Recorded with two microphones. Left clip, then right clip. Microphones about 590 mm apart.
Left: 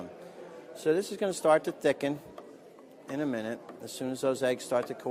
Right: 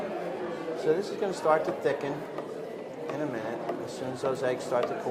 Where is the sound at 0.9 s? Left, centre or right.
Left.